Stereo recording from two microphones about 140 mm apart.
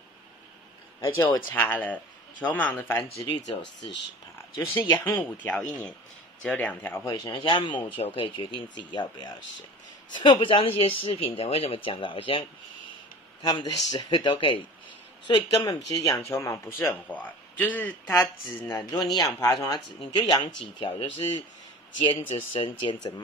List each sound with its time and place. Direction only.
1.0 s speech: 25° left (ahead or behind)
3.3 s speech: 30° left (ahead or behind)
4.6 s speech: 20° left (ahead or behind)
7.3 s speech: 35° left (ahead or behind); by 18.9 s 15° left (ahead or behind)
19.1 s speech: 30° left (ahead or behind)